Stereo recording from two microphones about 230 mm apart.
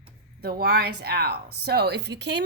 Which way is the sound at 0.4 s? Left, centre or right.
Right.